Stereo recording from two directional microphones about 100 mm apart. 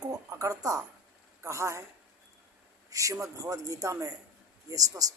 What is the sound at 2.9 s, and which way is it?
A man's voice, 35° right (ahead or behind).